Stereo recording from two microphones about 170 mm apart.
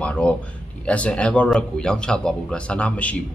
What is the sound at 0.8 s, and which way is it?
A man's voice, 5° left (ahead or behind).